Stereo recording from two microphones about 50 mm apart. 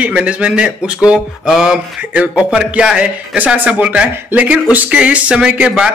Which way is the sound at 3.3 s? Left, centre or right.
Right.